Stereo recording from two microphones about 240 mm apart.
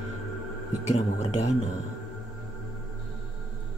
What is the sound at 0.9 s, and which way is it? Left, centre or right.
Speech, left.